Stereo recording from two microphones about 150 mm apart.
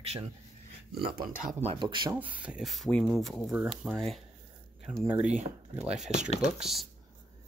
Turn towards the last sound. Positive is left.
turn(degrees=0)  # may be behind; listen again after turning